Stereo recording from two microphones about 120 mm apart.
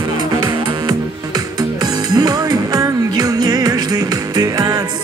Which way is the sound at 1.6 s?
35° right (ahead or behind).